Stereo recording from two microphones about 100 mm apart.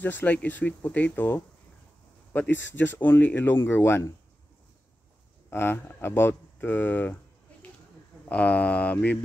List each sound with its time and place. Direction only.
0.0 s speech: 20° left (ahead or behind)
5.5 s speech: 20° left (ahead or behind)
8.3 s speech: 15° left (ahead or behind)